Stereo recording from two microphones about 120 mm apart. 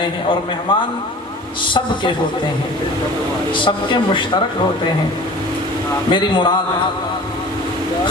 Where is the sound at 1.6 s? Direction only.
45° left (ahead or behind).